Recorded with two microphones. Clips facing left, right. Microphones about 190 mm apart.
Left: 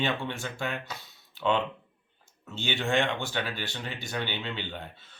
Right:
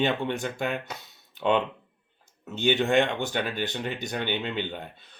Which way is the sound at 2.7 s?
20° right (ahead or behind).